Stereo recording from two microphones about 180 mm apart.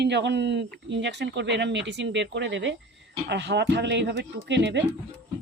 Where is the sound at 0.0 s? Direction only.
70° right (ahead or behind).